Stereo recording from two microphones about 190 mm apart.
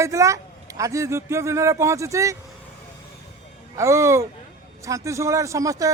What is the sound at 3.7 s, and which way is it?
Speech, 15° right (ahead or behind).